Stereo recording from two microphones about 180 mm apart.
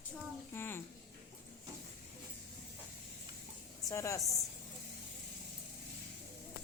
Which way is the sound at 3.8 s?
15° left (ahead or behind).